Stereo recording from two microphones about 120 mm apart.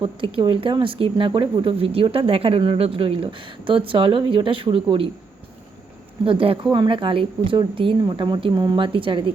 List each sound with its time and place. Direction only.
0.0 s speech: 45° right (ahead or behind)
6.2 s speech: 50° right (ahead or behind)